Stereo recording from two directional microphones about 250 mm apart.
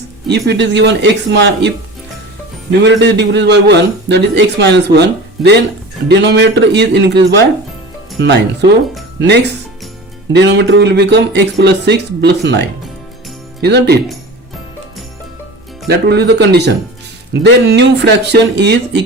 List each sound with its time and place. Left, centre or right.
0.3 s a man's voice: right
2.8 s a man's voice: right
15.9 s a man's voice: right